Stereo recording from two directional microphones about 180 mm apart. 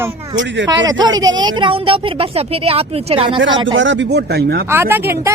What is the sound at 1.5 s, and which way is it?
Speech, 30° right (ahead or behind).